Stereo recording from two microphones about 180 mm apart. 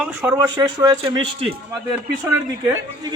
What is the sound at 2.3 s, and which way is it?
Speech, 15° right (ahead or behind).